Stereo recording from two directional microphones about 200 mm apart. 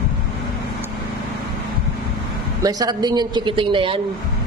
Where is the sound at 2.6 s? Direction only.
20° right (ahead or behind).